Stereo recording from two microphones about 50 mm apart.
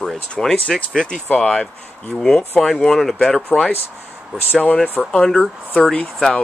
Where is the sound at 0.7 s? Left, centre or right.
Left.